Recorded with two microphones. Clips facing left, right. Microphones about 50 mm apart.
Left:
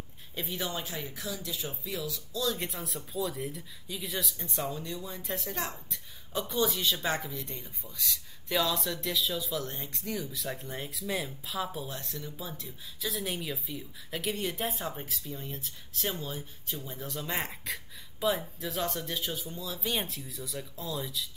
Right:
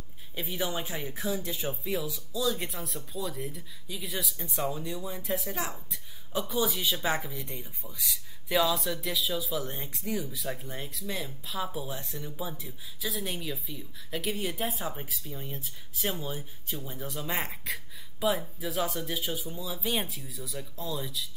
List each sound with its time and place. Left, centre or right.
0.3 s speech: centre
0.7 s speech: centre
2.3 s speech: centre
12.0 s speech: centre